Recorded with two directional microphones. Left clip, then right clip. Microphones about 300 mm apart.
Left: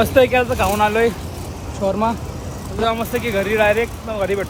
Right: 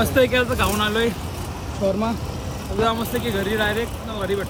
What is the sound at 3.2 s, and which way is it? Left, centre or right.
Speech, left.